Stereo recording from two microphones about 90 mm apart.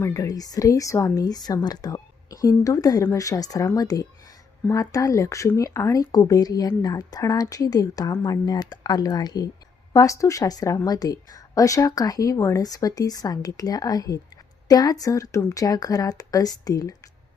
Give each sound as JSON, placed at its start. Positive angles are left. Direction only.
{"t": 0.0, "sound": "a woman's voice", "side_deg": 35}
{"t": 12.6, "sound": "a woman's voice", "side_deg": 45}